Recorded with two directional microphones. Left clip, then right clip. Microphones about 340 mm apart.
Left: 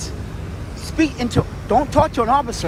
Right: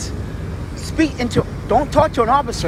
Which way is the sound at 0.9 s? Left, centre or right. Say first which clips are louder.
Right 1 dB; centre.